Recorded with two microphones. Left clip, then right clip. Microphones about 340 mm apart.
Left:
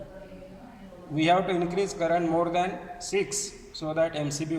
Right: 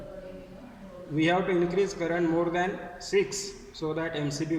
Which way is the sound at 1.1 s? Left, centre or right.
Centre.